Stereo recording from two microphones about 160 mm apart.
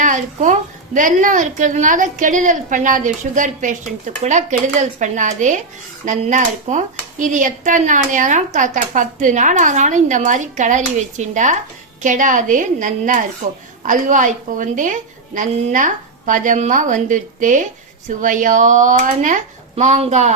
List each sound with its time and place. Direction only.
0.0 s a woman's voice: 50° right (ahead or behind)
19.7 s a woman's voice: 40° right (ahead or behind)